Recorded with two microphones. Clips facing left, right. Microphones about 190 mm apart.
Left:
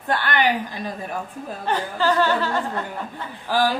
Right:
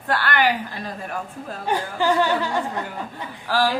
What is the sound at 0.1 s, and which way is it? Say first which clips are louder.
Speech: even; 20° left (ahead or behind).